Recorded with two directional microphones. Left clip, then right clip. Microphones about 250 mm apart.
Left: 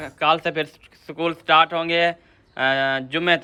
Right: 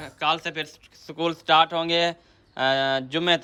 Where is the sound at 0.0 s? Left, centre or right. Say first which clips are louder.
Left 5 dB; centre.